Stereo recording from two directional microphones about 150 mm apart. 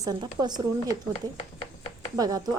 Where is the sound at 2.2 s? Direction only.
25° right (ahead or behind).